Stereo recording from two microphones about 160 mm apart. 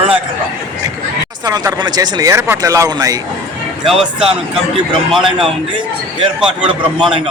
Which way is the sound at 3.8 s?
Centre (ahead or behind).